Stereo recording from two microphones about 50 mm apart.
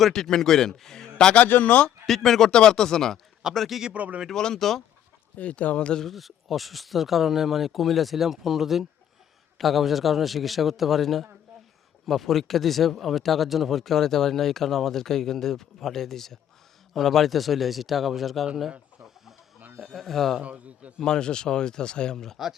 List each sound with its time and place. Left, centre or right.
0.0 s a man's voice: centre
1.5 s speech: left
2.0 s a man's voice: centre
3.9 s speech: right
4.3 s a man's voice: centre
5.4 s speech: left
6.0 s speech: centre
19.8 s speech: centre
20.4 s a man's voice: right
21.0 s a man's voice: centre